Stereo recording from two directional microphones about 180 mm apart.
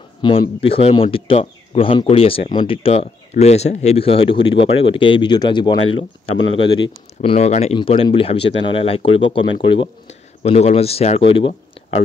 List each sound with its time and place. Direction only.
0.2 s speech: 30° left (ahead or behind)
6.3 s speech: 90° left
6.6 s speech: 25° left (ahead or behind)
7.2 s speech: 40° left (ahead or behind)